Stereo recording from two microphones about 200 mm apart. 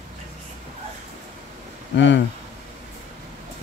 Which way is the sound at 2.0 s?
65° left (ahead or behind).